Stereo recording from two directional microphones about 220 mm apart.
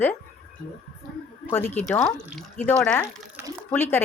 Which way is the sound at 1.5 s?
10° left (ahead or behind).